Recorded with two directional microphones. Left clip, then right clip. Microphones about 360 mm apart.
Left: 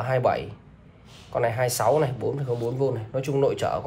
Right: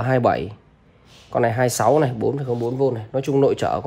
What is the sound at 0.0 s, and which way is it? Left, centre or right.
Speech, right.